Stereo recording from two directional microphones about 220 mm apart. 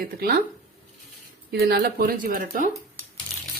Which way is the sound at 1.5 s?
45° right (ahead or behind).